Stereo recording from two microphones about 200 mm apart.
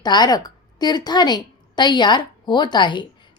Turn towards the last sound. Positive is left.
turn(degrees=20)  # may be behind; listen again after turning